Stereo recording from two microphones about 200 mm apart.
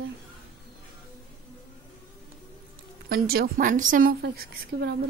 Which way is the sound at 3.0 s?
50° right (ahead or behind).